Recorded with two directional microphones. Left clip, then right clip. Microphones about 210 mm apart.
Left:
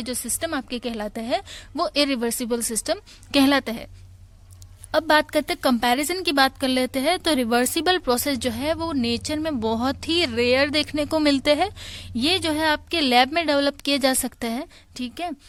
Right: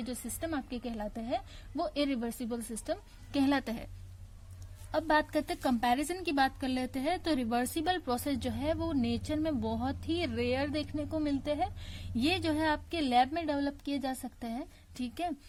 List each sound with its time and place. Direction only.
0.0 s a woman's voice: 25° left (ahead or behind)
4.9 s a woman's voice: 30° left (ahead or behind)